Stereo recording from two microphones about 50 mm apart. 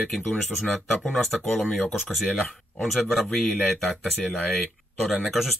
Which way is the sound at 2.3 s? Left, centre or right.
Left.